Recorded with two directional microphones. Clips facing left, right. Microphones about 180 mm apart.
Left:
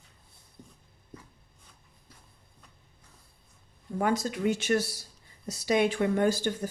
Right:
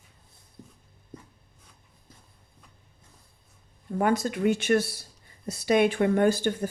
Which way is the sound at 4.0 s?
60° right (ahead or behind).